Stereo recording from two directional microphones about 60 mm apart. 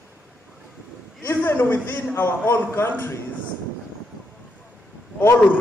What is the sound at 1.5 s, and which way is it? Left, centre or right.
A man's voice, left.